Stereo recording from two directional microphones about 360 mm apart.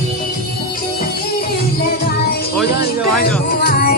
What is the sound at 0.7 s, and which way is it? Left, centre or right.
Music, left.